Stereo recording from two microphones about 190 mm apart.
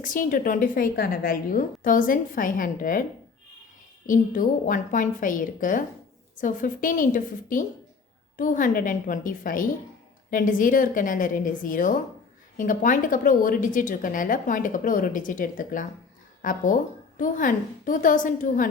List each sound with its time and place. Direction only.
0.0 s a woman's voice: 45° left (ahead or behind)